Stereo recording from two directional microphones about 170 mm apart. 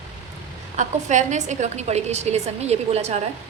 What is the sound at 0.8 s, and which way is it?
A woman's voice, 45° right (ahead or behind).